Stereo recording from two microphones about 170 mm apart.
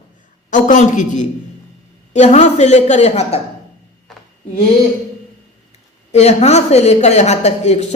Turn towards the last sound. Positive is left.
turn(degrees=40)  # may be behind; listen again after turning